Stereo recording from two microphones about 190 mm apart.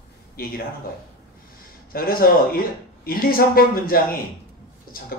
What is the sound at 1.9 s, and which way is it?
A man's voice, 50° left (ahead or behind).